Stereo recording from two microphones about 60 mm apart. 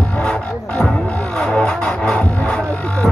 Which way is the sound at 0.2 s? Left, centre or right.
Centre.